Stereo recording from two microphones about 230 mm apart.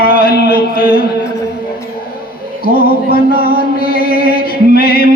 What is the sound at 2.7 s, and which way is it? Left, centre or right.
Music, left.